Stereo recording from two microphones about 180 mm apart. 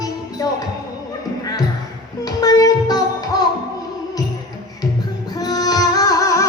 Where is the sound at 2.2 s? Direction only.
20° left (ahead or behind).